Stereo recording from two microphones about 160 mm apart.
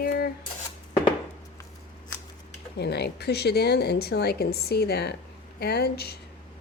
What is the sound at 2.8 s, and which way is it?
Speech, 90° left.